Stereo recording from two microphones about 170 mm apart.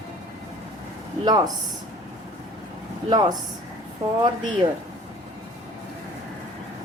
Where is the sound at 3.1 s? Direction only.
25° right (ahead or behind).